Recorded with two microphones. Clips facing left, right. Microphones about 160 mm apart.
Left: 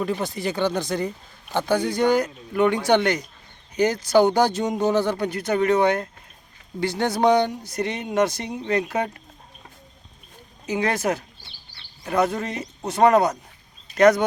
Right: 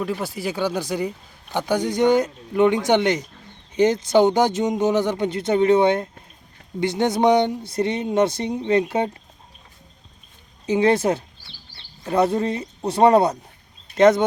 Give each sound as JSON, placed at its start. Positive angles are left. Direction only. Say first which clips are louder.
{"t": 0.0, "sound": "speech", "louder": "even", "side_deg": -5}
{"t": 10.7, "sound": "speech", "louder": "right 5 dB", "side_deg": -25}